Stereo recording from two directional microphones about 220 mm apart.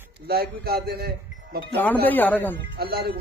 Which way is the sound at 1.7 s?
5° left (ahead or behind).